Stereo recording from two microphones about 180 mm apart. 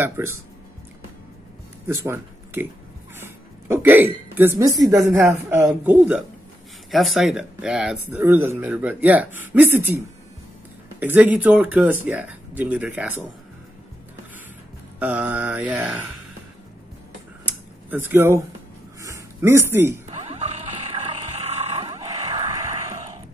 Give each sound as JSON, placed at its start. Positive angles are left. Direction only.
{"t": 0.0, "sound": "speech", "side_deg": -15}
{"t": 1.9, "sound": "a man's voice", "side_deg": -15}
{"t": 11.0, "sound": "speech", "side_deg": -10}
{"t": 15.0, "sound": "speech", "side_deg": -10}
{"t": 17.5, "sound": "a sound", "side_deg": -10}
{"t": 19.7, "sound": "speech", "side_deg": -15}
{"t": 20.2, "sound": "a sound", "side_deg": -35}